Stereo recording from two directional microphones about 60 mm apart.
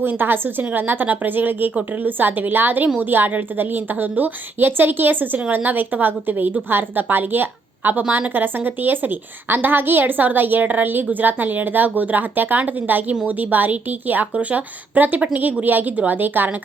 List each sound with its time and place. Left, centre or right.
0.0 s a woman's voice: right